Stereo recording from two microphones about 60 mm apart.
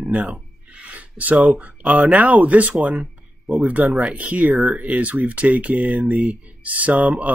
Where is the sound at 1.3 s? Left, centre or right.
Centre.